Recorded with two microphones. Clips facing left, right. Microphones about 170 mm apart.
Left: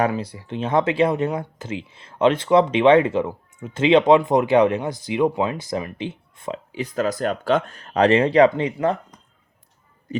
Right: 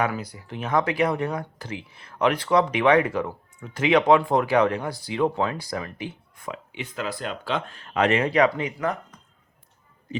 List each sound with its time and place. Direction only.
0.1 s speech: 30° left (ahead or behind)
6.7 s speech: 40° left (ahead or behind)